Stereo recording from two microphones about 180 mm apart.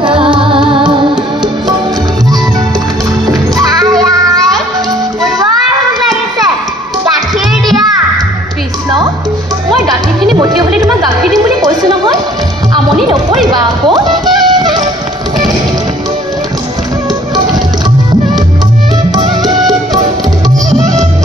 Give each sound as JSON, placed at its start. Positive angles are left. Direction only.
{"t": 0.0, "sound": "music", "side_deg": -30}
{"t": 3.3, "sound": "music", "side_deg": -20}
{"t": 4.0, "sound": "child singing", "side_deg": -20}
{"t": 10.6, "sound": "chatter", "side_deg": -20}
{"t": 13.5, "sound": "music", "side_deg": -25}
{"t": 19.1, "sound": "music", "side_deg": -20}